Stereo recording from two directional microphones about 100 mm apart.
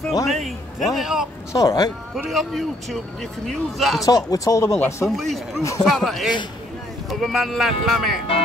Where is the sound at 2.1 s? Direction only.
Centre (ahead or behind).